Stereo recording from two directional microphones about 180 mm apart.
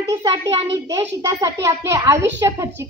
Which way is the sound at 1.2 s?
20° right (ahead or behind).